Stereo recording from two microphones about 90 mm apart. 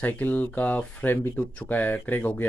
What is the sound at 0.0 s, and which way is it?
Speech, 20° left (ahead or behind).